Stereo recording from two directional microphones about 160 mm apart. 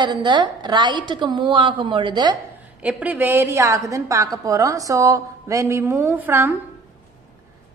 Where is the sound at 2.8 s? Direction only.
10° right (ahead or behind).